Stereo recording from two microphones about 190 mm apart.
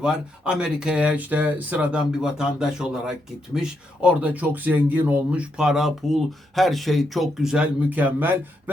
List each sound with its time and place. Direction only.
0.0 s speech: 5° right (ahead or behind)